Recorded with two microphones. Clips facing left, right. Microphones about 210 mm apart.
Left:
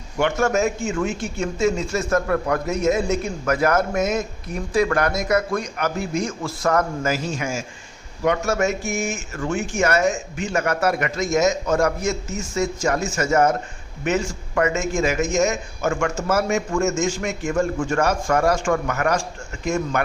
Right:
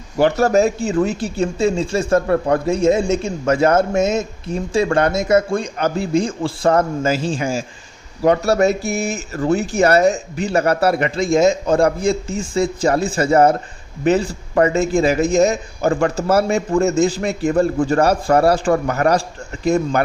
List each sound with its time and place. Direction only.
0.2 s speech: 35° right (ahead or behind)